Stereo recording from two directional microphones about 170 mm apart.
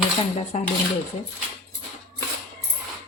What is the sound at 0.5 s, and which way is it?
Speech, 40° left (ahead or behind).